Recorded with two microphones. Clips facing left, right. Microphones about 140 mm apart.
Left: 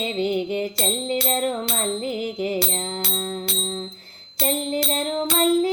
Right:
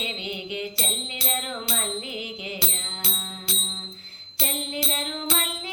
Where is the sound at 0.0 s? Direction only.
45° left (ahead or behind).